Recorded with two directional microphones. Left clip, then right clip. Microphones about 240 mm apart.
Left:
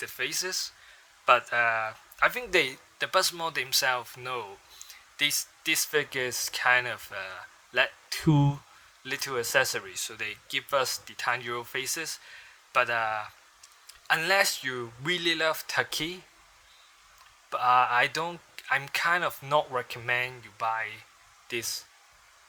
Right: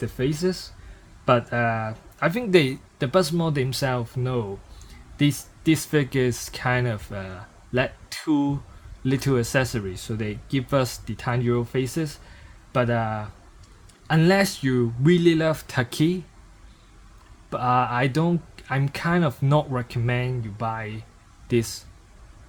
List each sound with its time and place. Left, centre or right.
0.0 s speech: left; by 3.1 s centre
3.1 s speech: centre
5.9 s speech: centre
17.5 s speech: centre